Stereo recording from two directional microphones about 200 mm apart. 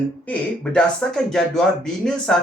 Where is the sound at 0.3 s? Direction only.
5° left (ahead or behind).